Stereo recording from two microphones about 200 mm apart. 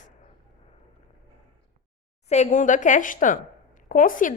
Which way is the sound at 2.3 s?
35° left (ahead or behind).